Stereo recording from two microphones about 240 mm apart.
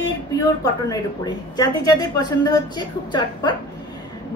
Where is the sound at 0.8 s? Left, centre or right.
Centre.